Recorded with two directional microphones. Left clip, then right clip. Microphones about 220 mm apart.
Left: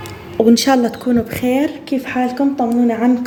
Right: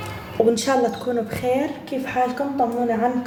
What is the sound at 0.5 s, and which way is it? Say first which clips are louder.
A woman's voice: left 6 dB; 40° left (ahead or behind).